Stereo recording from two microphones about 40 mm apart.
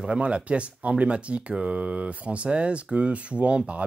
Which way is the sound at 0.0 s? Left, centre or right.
Right.